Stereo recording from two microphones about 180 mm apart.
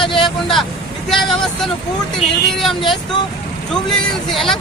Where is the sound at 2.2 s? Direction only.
40° left (ahead or behind).